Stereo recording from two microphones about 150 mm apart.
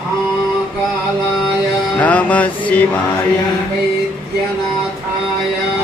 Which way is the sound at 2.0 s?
10° left (ahead or behind).